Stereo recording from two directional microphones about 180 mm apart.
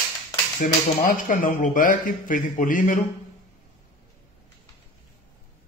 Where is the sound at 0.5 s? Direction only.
45° left (ahead or behind).